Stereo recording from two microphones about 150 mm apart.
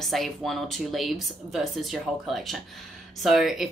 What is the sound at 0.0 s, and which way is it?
Speech, centre (ahead or behind).